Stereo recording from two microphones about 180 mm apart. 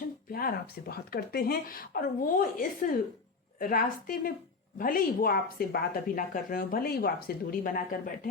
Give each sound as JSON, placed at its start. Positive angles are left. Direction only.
{"t": 0.3, "sound": "speech", "side_deg": 55}